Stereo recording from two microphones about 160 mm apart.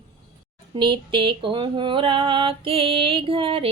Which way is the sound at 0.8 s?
30° right (ahead or behind).